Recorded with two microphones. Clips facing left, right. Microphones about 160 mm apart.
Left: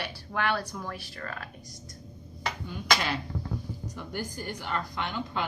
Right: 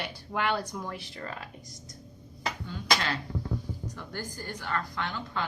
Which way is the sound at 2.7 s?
15° left (ahead or behind).